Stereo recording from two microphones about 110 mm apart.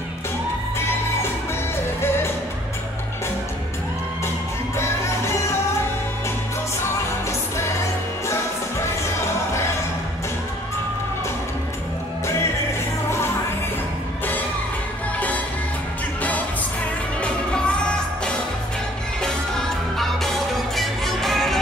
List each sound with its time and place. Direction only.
2.0 s music: 20° left (ahead or behind)
4.7 s music: 25° left (ahead or behind)
9.0 s music: 25° left (ahead or behind)
15.1 s music: 15° left (ahead or behind)
17.2 s music: 10° left (ahead or behind)